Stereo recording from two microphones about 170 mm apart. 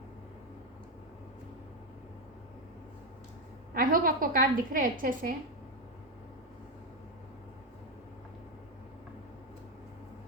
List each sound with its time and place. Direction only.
3.8 s a woman's voice: 55° right (ahead or behind)